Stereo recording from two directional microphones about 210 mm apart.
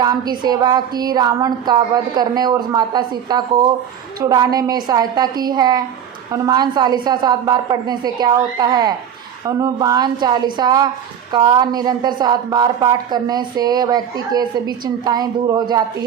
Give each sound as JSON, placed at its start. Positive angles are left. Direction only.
{"t": 0.0, "sound": "speech", "side_deg": -20}